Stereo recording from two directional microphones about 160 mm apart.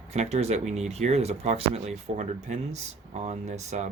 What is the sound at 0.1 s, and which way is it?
Speech, 40° right (ahead or behind).